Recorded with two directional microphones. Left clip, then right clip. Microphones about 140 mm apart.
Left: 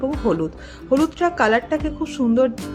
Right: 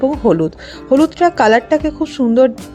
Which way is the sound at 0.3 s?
40° right (ahead or behind).